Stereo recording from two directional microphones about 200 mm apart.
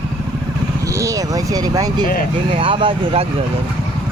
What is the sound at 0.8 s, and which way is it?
Vehicle, 15° right (ahead or behind).